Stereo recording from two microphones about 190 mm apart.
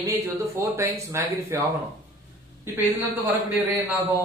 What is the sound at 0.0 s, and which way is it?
A man's voice, 10° right (ahead or behind).